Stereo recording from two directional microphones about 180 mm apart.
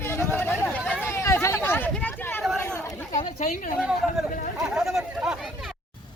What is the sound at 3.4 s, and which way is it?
Speech, 45° left (ahead or behind).